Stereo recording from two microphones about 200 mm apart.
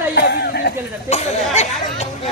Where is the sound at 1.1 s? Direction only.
35° left (ahead or behind).